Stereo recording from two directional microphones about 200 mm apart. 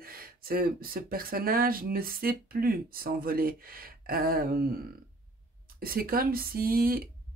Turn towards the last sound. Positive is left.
turn(degrees=-50)  # may be behind; listen again after turning